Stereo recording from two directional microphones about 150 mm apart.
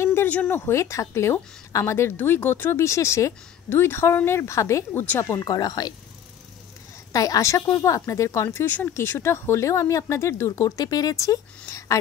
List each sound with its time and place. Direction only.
0.0 s a woman's voice: 15° left (ahead or behind)
7.1 s speech: 25° left (ahead or behind)